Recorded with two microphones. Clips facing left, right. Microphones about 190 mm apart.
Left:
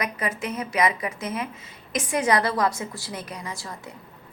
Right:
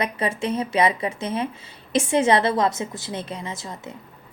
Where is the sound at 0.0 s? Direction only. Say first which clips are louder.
Right 4 dB; 30° right (ahead or behind).